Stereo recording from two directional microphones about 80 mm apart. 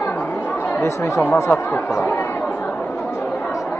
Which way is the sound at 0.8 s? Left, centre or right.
Left.